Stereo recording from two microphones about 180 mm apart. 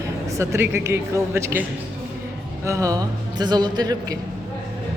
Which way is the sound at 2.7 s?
20° right (ahead or behind).